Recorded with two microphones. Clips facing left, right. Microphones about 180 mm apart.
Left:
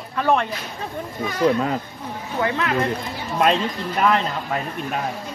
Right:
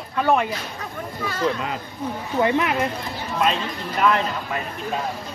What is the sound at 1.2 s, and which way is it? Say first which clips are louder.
Speech: left 4 dB; 15° left (ahead or behind).